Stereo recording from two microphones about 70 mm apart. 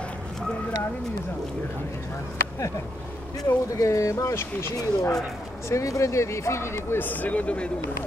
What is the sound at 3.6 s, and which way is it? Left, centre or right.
Speech, left.